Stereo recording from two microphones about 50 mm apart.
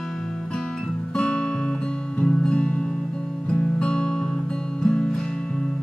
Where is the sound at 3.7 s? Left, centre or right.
Centre.